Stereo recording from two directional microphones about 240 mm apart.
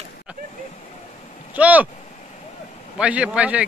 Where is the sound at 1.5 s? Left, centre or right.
Centre.